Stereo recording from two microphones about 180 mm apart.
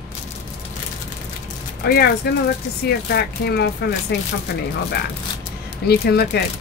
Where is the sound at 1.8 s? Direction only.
65° left (ahead or behind).